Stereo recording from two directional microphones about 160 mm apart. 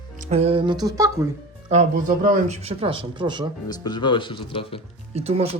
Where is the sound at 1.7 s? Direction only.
50° right (ahead or behind); by 3.4 s 30° right (ahead or behind).